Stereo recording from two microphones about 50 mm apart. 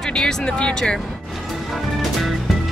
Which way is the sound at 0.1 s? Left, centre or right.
Centre.